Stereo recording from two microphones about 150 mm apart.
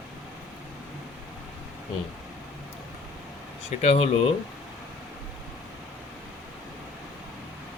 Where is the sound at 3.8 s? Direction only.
45° left (ahead or behind).